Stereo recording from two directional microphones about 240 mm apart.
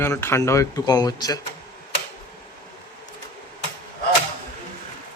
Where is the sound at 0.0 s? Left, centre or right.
Centre.